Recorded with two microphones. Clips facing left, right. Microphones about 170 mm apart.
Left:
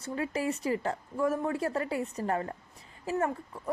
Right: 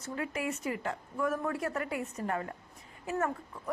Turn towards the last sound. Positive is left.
turn(degrees=30)  # may be behind; listen again after turning